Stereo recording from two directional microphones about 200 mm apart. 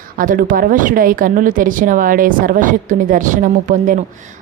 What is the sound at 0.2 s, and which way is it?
A woman's voice, 45° right (ahead or behind).